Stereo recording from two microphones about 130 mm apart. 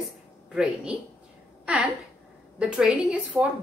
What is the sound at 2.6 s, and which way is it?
Speech, 5° right (ahead or behind).